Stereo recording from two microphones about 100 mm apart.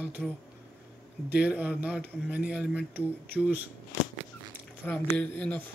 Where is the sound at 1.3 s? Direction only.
15° right (ahead or behind).